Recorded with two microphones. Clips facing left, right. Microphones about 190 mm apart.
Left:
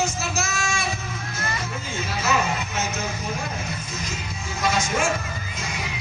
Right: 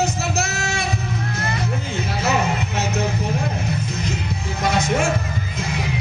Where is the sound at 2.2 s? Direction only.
60° right (ahead or behind).